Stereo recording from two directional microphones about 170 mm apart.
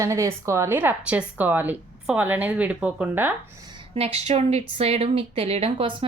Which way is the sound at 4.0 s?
35° right (ahead or behind).